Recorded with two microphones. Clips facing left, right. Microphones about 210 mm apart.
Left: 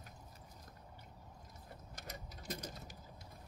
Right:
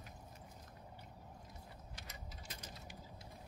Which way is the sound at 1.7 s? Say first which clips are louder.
Left 4 dB; 45° left (ahead or behind).